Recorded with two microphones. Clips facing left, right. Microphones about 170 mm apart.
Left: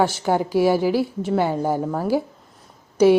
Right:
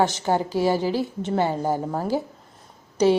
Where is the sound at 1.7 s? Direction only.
10° right (ahead or behind).